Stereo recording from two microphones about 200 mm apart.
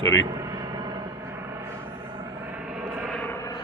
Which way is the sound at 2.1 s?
15° right (ahead or behind).